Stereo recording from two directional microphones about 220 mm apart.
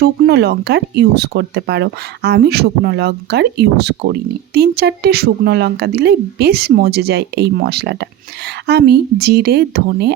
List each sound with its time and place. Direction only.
0.0 s speech: 50° right (ahead or behind)